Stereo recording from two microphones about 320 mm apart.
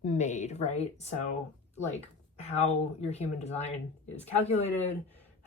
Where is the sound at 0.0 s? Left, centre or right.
Left.